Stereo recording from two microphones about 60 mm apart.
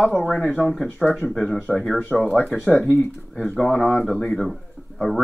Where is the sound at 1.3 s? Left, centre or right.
Centre.